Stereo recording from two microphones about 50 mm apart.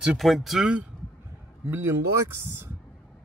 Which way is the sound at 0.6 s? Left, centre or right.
Right.